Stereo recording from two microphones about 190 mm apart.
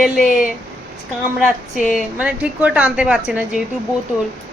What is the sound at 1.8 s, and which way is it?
A woman's voice, 5° right (ahead or behind).